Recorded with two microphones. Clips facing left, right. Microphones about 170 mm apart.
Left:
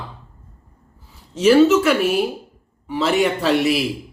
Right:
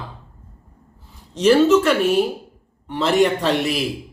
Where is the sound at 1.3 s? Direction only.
5° left (ahead or behind).